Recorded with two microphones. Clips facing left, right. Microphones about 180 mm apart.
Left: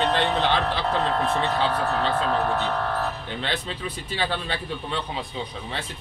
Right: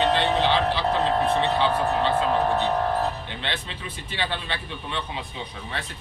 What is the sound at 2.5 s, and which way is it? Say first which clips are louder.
Music: right 3 dB; 20° right (ahead or behind).